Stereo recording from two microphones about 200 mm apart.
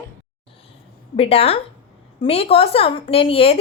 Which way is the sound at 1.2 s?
30° left (ahead or behind).